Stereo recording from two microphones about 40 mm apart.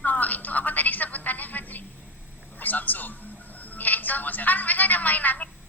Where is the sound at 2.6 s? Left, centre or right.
Left.